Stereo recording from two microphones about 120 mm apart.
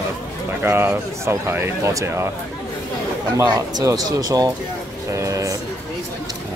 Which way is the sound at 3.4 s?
30° right (ahead or behind).